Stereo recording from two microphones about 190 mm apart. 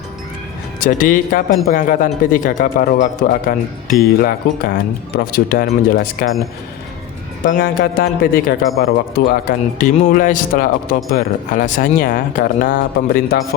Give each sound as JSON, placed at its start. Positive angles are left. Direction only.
{"t": 0.9, "sound": "speech", "side_deg": 45}
{"t": 7.4, "sound": "speech", "side_deg": 45}